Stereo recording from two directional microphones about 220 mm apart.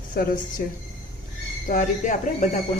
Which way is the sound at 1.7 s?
35° left (ahead or behind).